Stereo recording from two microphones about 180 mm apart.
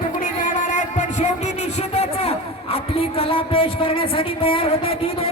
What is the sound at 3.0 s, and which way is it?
Speech, 30° left (ahead or behind).